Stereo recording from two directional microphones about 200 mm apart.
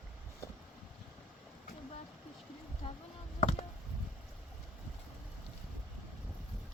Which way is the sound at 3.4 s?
35° left (ahead or behind).